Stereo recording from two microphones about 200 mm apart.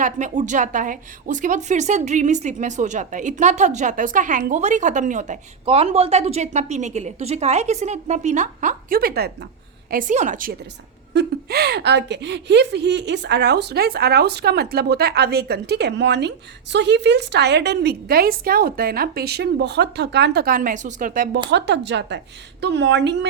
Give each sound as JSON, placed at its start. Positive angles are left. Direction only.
{"t": 0.0, "sound": "a woman's voice", "side_deg": -40}
{"t": 11.1, "sound": "a woman's voice", "side_deg": -55}
{"t": 21.5, "sound": "a woman's voice", "side_deg": -60}